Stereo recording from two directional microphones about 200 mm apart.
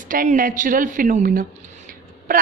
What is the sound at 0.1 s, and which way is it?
A woman's voice, 45° right (ahead or behind).